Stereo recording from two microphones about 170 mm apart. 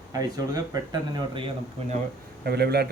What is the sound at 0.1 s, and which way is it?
Speech, 20° right (ahead or behind).